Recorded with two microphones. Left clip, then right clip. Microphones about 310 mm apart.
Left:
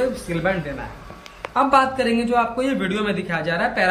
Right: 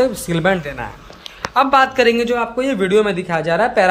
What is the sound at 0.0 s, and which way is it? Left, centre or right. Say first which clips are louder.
Speech: right 6 dB; centre.